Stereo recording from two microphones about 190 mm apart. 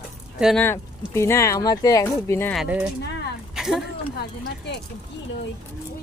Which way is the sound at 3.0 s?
60° left (ahead or behind).